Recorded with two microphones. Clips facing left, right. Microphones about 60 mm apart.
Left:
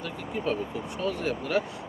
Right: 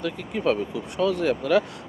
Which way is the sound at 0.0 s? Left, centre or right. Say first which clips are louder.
Right 6 dB; right.